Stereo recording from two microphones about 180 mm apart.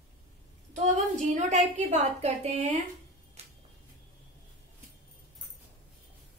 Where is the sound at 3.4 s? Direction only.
35° right (ahead or behind).